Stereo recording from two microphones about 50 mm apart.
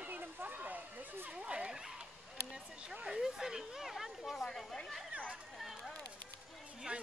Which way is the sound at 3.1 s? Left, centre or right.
Centre.